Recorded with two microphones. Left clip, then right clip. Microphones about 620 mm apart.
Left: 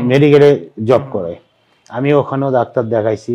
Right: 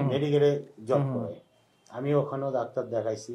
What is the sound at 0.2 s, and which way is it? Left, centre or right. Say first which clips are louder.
Speech: left 16 dB; left.